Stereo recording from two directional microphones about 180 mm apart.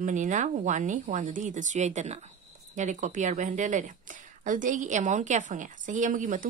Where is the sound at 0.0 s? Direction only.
45° right (ahead or behind).